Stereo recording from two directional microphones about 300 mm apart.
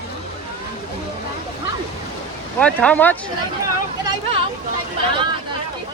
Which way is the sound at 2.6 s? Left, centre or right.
Centre.